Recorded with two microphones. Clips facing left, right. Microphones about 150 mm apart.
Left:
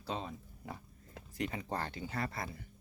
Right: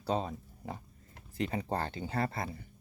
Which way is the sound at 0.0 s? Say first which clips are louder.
Right 7 dB; 40° right (ahead or behind).